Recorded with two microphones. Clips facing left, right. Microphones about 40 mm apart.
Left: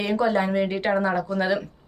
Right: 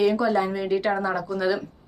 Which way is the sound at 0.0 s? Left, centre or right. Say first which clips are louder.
Right 1 dB; left.